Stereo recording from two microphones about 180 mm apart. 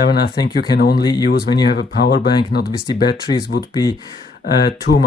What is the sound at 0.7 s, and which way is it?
Speech, 60° left (ahead or behind).